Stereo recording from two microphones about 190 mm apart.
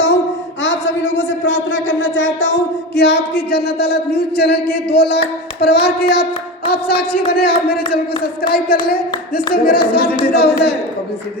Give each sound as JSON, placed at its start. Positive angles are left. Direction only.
{"t": 0.6, "sound": "a sound", "side_deg": 75}
{"t": 5.5, "sound": "child singing", "side_deg": 55}
{"t": 7.3, "sound": "child singing", "side_deg": 55}
{"t": 8.4, "sound": "speech", "side_deg": 50}
{"t": 10.3, "sound": "child singing", "side_deg": 55}